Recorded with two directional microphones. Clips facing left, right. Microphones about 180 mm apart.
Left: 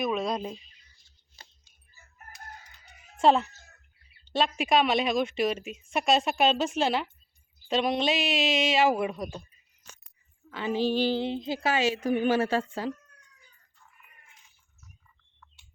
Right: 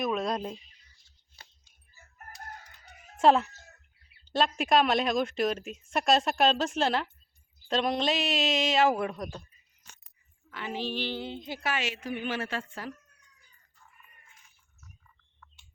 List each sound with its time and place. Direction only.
0.0 s speech: centre (ahead or behind)
2.1 s crowing: 45° right (ahead or behind)
3.2 s speech: 5° right (ahead or behind)
10.5 s speech: 30° left (ahead or behind)